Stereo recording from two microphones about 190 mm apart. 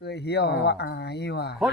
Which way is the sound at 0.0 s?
60° left (ahead or behind).